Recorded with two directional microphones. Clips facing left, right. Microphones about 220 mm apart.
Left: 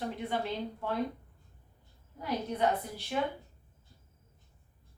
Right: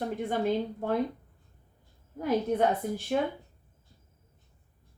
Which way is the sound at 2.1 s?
50° right (ahead or behind).